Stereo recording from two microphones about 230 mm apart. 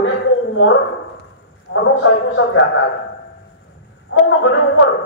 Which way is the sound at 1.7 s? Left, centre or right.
Left.